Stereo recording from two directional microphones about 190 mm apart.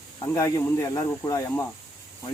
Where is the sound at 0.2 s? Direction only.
15° left (ahead or behind).